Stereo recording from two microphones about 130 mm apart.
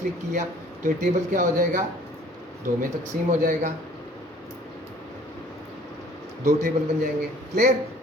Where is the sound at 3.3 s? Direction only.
70° right (ahead or behind).